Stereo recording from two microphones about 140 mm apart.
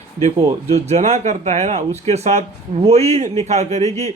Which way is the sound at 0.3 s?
55° right (ahead or behind).